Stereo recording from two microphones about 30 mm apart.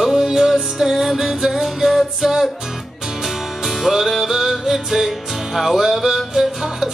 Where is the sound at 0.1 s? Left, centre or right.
Centre.